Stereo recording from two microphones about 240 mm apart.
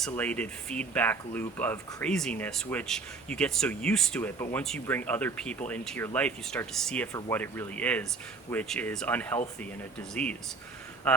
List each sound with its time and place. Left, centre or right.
0.0 s speech: centre